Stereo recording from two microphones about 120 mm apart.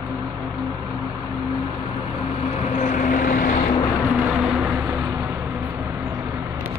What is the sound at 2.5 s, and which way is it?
Vehicle, 90° left.